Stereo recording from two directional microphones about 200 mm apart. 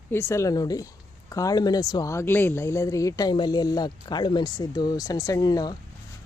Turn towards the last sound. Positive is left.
turn(degrees=20)  # may be behind; listen again after turning